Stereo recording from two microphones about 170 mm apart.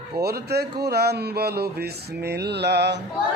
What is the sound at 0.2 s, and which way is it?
Speech, 70° right (ahead or behind).